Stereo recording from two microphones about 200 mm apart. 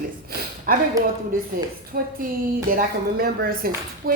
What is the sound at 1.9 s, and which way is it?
A woman's voice, 45° right (ahead or behind).